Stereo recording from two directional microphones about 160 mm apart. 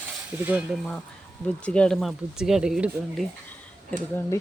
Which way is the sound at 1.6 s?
5° left (ahead or behind).